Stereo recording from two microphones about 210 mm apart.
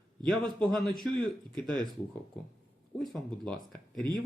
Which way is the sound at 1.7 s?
20° right (ahead or behind).